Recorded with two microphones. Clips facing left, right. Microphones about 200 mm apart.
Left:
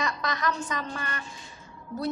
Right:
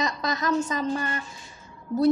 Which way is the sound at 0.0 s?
25° right (ahead or behind).